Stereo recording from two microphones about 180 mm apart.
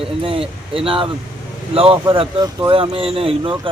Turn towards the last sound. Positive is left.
turn(degrees=-30)  # may be behind; listen again after turning